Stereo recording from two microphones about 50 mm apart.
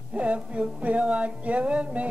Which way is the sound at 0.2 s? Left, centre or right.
Right.